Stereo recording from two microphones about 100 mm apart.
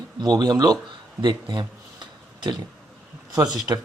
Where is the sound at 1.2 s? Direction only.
50° right (ahead or behind).